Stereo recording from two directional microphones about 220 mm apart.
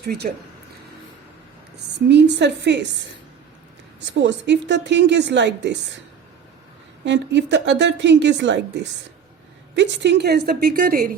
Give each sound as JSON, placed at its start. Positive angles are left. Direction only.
{"t": 0.0, "sound": "a woman's voice", "side_deg": -45}
{"t": 2.0, "sound": "a woman's voice", "side_deg": -50}
{"t": 4.2, "sound": "a woman's voice", "side_deg": -50}
{"t": 7.0, "sound": "a woman's voice", "side_deg": -55}